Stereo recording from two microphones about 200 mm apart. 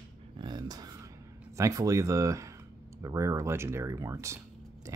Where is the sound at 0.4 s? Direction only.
20° right (ahead or behind).